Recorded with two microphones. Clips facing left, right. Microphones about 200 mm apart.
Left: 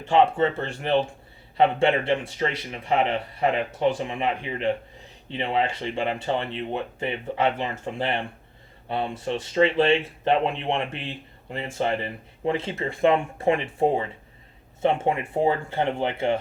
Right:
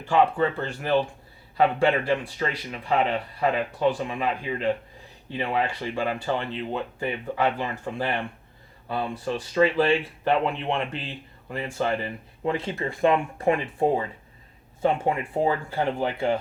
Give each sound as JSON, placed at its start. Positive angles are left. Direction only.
{"t": 0.0, "sound": "speech", "side_deg": 25}